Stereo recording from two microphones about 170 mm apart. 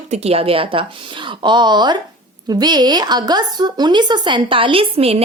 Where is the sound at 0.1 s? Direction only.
35° right (ahead or behind).